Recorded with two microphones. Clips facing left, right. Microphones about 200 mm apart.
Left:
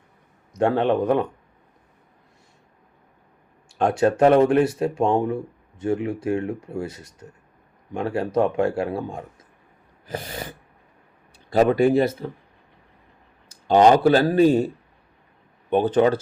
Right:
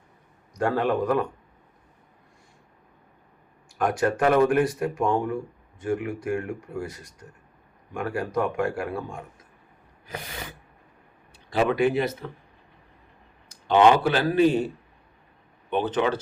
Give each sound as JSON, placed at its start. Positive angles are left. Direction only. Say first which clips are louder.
{"t": 0.5, "sound": "speech", "louder": "left 4 dB", "side_deg": 25}
{"t": 3.8, "sound": "speech", "louder": "left 5 dB", "side_deg": 25}
{"t": 10.1, "sound": "snort", "louder": "left 6 dB", "side_deg": 30}
{"t": 11.5, "sound": "speech", "louder": "left 5 dB", "side_deg": 40}
{"t": 13.7, "sound": "speech", "louder": "left 4 dB", "side_deg": 40}
{"t": 15.7, "sound": "speech", "louder": "left 6 dB", "side_deg": 45}